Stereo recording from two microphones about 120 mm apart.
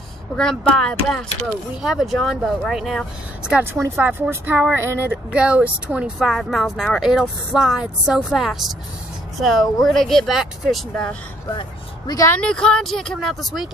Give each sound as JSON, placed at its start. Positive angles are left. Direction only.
{"t": 0.4, "sound": "speech", "side_deg": 5}
{"t": 4.0, "sound": "speech", "side_deg": -15}
{"t": 5.3, "sound": "speech", "side_deg": -10}
{"t": 12.3, "sound": "speech", "side_deg": 10}